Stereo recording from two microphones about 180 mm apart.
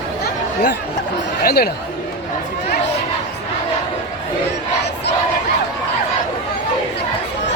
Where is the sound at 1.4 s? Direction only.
60° left (ahead or behind).